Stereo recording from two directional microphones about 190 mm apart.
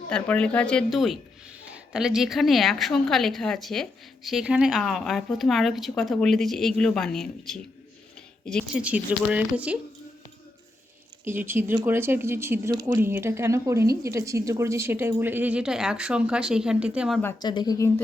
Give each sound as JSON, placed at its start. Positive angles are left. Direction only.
{"t": 0.1, "sound": "a woman's voice", "side_deg": 5}
{"t": 8.8, "sound": "speech", "side_deg": -5}
{"t": 11.3, "sound": "speech", "side_deg": -10}
{"t": 17.4, "sound": "speech", "side_deg": 20}